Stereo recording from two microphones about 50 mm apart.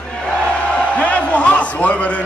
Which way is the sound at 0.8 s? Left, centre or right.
Left.